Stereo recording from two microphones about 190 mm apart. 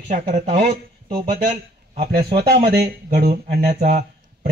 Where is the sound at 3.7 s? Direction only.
40° right (ahead or behind).